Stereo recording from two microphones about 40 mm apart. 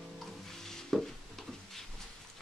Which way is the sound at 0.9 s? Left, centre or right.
Centre.